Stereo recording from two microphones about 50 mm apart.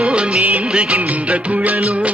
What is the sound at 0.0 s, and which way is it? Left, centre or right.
Music of bollywood, right.